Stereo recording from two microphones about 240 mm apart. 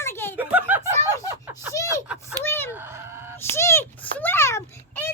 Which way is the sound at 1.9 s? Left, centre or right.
Centre.